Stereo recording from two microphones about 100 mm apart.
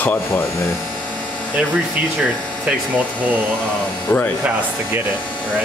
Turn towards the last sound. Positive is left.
turn(degrees=20)  # may be behind; listen again after turning